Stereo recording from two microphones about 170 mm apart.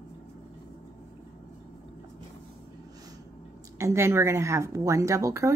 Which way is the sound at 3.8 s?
15° right (ahead or behind).